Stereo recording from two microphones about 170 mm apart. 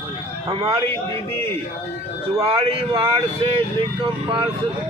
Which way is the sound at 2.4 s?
30° right (ahead or behind).